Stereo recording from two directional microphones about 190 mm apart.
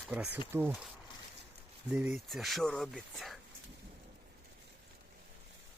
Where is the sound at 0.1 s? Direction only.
10° right (ahead or behind).